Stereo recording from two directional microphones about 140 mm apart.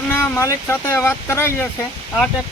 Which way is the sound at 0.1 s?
20° left (ahead or behind).